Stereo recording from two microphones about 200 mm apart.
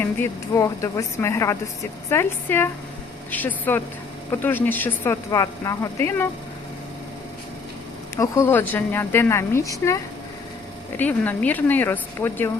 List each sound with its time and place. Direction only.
0.0 s speech: 10° left (ahead or behind)
8.1 s speech: 15° left (ahead or behind)